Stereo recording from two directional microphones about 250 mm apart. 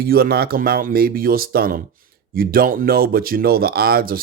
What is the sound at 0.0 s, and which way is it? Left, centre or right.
Speech, right.